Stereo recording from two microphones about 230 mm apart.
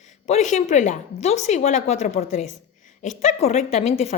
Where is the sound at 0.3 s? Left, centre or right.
Left.